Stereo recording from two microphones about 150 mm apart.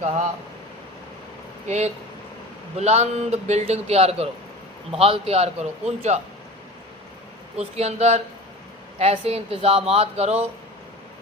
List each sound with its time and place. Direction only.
1.6 s a man's voice: 50° right (ahead or behind)
7.6 s a man's voice: 45° right (ahead or behind)